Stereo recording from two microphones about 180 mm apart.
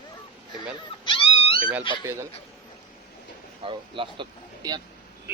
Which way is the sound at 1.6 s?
5° right (ahead or behind).